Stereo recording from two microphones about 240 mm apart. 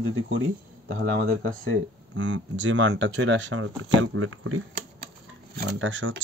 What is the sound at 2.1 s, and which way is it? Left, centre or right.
Speech, right.